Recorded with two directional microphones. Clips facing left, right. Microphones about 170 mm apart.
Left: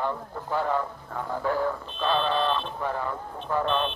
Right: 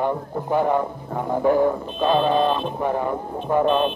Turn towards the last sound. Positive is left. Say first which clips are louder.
# right 7 dB
turn(degrees=-10)  # may be behind; listen again after turning